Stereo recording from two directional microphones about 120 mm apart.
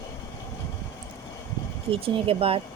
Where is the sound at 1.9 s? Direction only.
50° right (ahead or behind).